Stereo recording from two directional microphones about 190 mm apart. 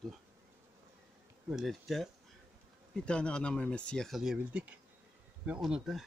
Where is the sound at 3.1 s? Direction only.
5° left (ahead or behind).